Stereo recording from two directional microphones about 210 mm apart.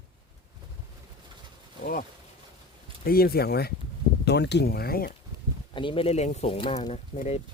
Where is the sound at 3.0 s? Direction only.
45° left (ahead or behind).